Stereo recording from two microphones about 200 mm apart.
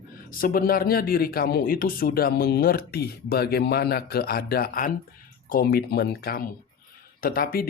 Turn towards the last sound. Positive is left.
turn(degrees=50)  # may be behind; listen again after turning